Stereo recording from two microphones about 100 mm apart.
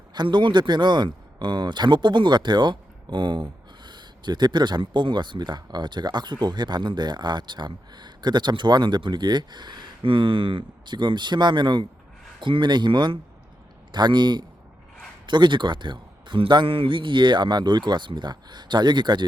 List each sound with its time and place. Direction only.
0.1 s speech: 50° right (ahead or behind)